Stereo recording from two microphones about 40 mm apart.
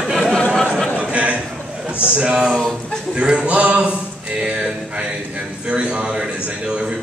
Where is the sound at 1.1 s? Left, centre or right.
Right.